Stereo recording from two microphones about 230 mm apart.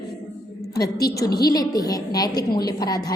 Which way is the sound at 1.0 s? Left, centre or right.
Centre.